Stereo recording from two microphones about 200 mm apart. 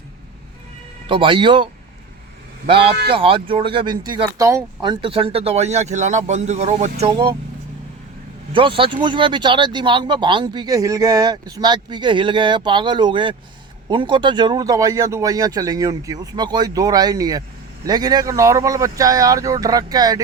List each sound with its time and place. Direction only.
1.0 s speech: 25° right (ahead or behind)
8.5 s speech: 25° right (ahead or behind)